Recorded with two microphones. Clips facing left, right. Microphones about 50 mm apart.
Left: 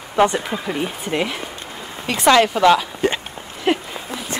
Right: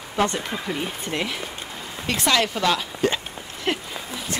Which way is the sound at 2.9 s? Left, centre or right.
Left.